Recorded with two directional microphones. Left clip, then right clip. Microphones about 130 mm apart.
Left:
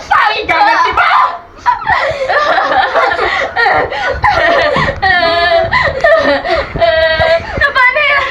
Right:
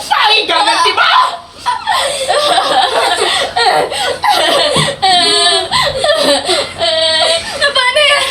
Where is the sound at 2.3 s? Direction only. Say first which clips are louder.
Even; 50° right (ahead or behind).